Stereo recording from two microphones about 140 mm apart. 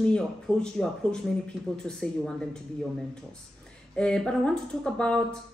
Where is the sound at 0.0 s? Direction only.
5° left (ahead or behind).